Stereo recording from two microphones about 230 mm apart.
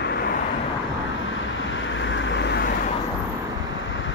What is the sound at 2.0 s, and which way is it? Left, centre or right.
Vehicle, left.